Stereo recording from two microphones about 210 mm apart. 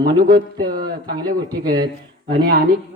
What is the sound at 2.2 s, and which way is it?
Speech, 50° right (ahead or behind).